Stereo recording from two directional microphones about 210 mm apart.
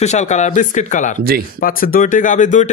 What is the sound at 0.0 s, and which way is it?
A man's voice, 35° left (ahead or behind).